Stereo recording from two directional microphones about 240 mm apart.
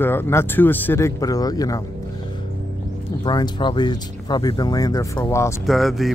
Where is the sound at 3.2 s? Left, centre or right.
Centre.